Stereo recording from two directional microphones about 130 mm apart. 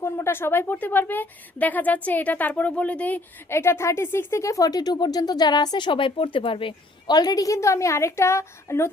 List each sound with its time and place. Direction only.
0.0 s a woman's voice: 20° left (ahead or behind)